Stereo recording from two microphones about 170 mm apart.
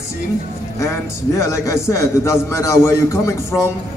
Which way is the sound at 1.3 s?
20° left (ahead or behind).